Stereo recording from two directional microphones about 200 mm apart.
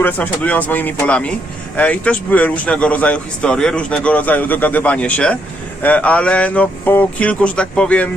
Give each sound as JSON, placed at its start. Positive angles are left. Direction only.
{"t": 0.0, "sound": "speech", "side_deg": 10}